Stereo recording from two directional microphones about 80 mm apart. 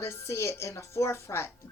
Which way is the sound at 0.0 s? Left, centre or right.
Left.